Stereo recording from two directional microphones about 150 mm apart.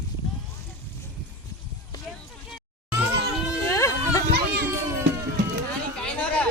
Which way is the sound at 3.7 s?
20° left (ahead or behind).